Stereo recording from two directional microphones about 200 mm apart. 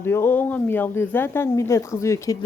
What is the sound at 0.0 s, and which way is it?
Speech, 10° left (ahead or behind).